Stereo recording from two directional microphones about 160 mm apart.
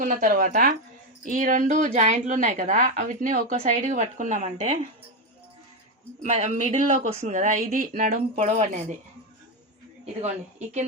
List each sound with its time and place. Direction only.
0.0 s speech: 60° right (ahead or behind)
3.5 s speech: 45° right (ahead or behind)
6.2 s speech: 50° right (ahead or behind)